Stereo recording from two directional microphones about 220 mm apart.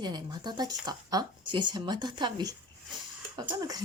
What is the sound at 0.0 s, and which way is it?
Speech, 20° right (ahead or behind).